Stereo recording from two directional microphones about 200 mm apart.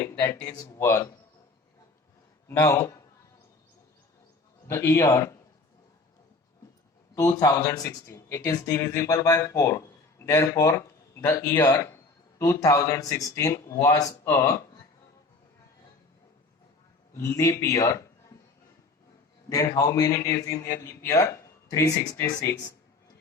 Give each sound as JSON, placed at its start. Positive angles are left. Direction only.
{"t": 0.0, "sound": "speech", "side_deg": 15}
{"t": 2.5, "sound": "speech", "side_deg": 15}
{"t": 4.7, "sound": "speech", "side_deg": 15}
{"t": 7.2, "sound": "speech", "side_deg": 15}
{"t": 17.2, "sound": "speech", "side_deg": 15}
{"t": 19.5, "sound": "speech", "side_deg": 15}